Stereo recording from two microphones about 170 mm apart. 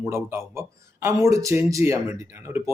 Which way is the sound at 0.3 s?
15° right (ahead or behind).